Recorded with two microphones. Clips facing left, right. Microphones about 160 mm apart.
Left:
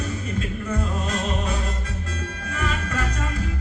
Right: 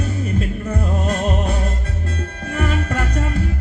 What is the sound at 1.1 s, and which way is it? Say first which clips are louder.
Music: right 7 dB; 55° right (ahead or behind).